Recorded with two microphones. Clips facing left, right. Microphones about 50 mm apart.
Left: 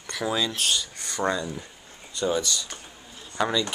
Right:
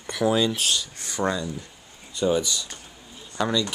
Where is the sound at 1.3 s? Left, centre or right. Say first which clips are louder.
Even; centre.